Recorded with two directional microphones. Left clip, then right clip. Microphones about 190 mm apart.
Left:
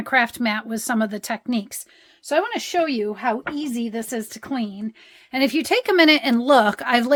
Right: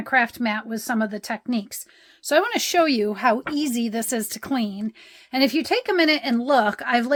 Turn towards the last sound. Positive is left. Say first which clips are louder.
# left 2 dB
turn(degrees=20)  # may be behind; listen again after turning